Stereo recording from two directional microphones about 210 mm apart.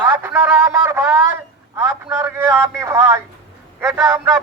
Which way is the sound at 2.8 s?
10° right (ahead or behind).